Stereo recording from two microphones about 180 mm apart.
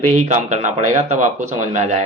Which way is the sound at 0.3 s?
40° right (ahead or behind).